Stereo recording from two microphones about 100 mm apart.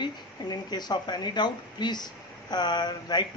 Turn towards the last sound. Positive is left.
turn(degrees=45)  # may be behind; listen again after turning